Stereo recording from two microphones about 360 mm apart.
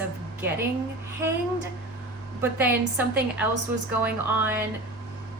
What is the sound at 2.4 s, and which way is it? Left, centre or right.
A woman's voice, centre.